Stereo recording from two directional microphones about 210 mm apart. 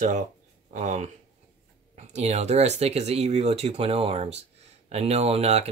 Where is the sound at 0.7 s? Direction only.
35° right (ahead or behind).